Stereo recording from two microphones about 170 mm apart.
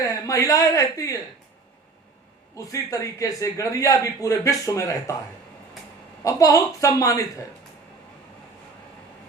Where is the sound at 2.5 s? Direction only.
20° left (ahead or behind).